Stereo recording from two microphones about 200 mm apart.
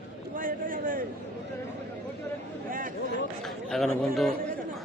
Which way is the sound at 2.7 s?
45° right (ahead or behind).